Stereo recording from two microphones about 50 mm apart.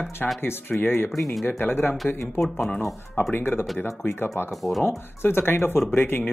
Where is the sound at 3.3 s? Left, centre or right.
Left.